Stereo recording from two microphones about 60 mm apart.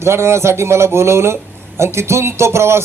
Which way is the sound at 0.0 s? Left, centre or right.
Right.